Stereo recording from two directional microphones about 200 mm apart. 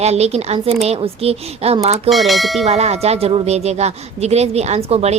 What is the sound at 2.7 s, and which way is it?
A woman's voice, 30° right (ahead or behind).